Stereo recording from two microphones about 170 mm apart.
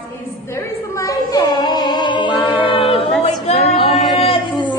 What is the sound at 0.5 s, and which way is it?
A woman's voice, 20° left (ahead or behind).